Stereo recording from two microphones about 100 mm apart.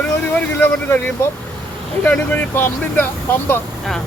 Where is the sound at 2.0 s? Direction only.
20° left (ahead or behind).